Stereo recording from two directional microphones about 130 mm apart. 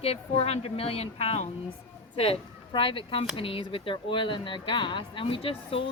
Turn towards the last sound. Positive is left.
turn(degrees=45)  # may be behind; listen again after turning